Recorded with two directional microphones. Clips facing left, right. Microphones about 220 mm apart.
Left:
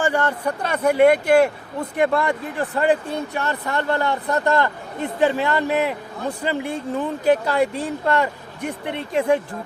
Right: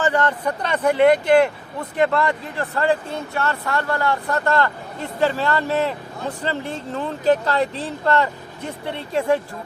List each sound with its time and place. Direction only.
0.0 s speech: 10° left (ahead or behind)